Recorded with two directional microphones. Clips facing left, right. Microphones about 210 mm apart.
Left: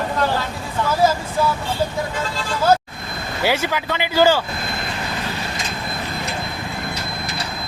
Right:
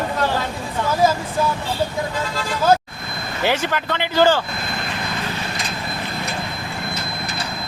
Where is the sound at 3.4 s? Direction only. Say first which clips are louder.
Even; 10° left (ahead or behind).